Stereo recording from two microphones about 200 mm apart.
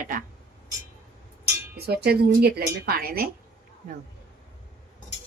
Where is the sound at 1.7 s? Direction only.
55° right (ahead or behind).